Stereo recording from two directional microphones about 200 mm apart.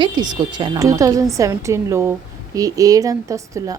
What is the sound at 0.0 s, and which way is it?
A woman's voice, 20° right (ahead or behind).